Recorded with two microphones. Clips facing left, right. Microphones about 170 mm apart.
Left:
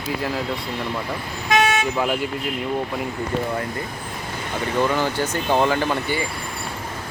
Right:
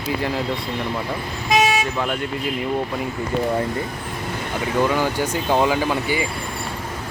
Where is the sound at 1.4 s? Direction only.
5° right (ahead or behind).